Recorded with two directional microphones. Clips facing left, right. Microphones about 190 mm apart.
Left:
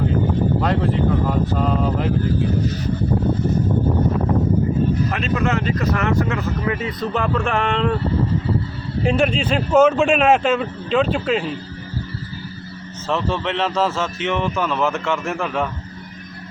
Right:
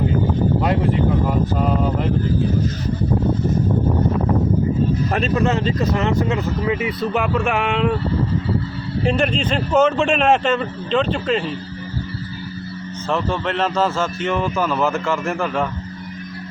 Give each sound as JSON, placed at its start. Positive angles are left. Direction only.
{"t": 1.5, "sound": "a man's voice", "side_deg": -5}
{"t": 5.1, "sound": "speech", "side_deg": -35}
{"t": 7.4, "sound": "a man's voice", "side_deg": -5}
{"t": 9.0, "sound": "a man's voice", "side_deg": 0}
{"t": 13.1, "sound": "a man's voice", "side_deg": 0}